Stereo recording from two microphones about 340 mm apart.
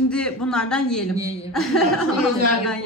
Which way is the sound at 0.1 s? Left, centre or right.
Centre.